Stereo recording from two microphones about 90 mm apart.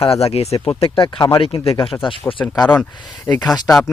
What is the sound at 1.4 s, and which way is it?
Speech, 85° left.